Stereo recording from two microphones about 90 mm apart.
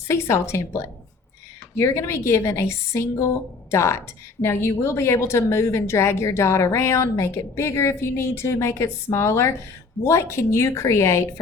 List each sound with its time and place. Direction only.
0.1 s a woman's voice: 30° left (ahead or behind)